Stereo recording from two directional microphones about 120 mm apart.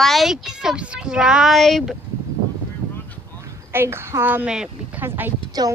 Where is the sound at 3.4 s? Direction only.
20° right (ahead or behind).